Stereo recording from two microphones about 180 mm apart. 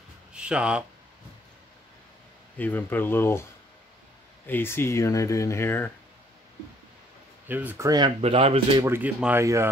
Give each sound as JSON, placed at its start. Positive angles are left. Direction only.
{"t": 0.3, "sound": "speech", "side_deg": -5}
{"t": 2.5, "sound": "speech", "side_deg": 10}
{"t": 4.5, "sound": "speech", "side_deg": 10}
{"t": 7.4, "sound": "speech", "side_deg": -10}
{"t": 8.2, "sound": "speech", "side_deg": -35}
{"t": 8.8, "sound": "speech", "side_deg": -10}